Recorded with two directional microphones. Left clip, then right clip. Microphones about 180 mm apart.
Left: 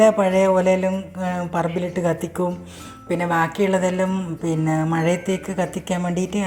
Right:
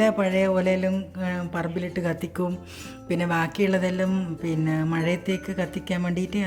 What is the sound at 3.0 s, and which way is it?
Speech, 25° right (ahead or behind).